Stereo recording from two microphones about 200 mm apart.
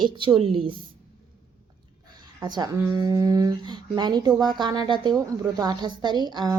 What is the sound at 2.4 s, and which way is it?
A woman's voice, 20° right (ahead or behind).